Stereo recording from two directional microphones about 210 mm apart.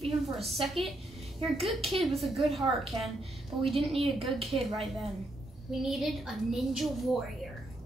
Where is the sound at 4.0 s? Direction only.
25° right (ahead or behind).